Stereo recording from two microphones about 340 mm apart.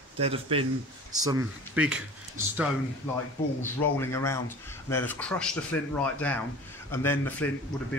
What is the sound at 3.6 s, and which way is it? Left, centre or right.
Speech, centre.